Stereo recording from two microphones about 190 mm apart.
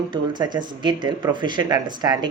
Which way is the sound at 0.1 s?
20° right (ahead or behind).